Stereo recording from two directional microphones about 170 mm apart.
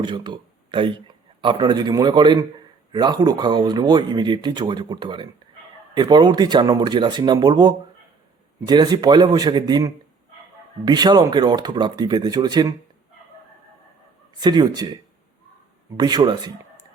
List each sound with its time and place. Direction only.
0.0 s a man's voice: 25° right (ahead or behind)
14.3 s speech: 25° right (ahead or behind)
16.0 s speech: 25° right (ahead or behind)